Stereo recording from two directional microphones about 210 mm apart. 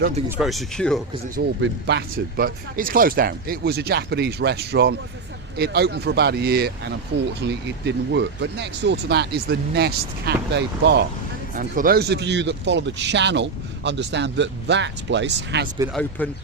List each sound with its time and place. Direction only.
0.3 s speech: centre (ahead or behind)
1.4 s speech: 50° right (ahead or behind)
11.5 s speech: 40° right (ahead or behind)
15.9 s speech: 5° left (ahead or behind)